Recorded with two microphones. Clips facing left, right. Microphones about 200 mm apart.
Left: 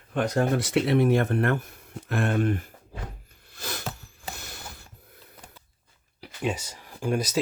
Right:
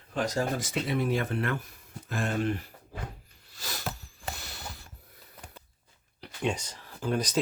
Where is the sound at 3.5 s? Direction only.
55° left (ahead or behind).